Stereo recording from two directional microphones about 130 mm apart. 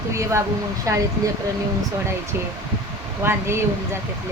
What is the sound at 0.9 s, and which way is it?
Speech, 20° right (ahead or behind).